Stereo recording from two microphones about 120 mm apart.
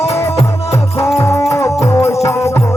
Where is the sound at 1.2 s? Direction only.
25° left (ahead or behind).